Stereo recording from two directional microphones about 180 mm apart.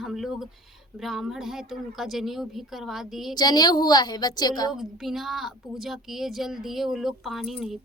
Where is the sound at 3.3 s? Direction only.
20° left (ahead or behind).